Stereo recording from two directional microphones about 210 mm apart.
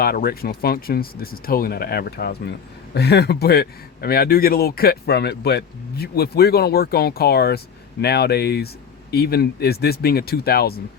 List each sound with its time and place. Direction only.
0.0 s speech: 45° left (ahead or behind)